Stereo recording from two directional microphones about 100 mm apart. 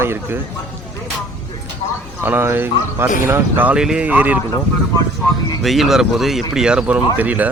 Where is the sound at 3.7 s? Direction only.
10° right (ahead or behind).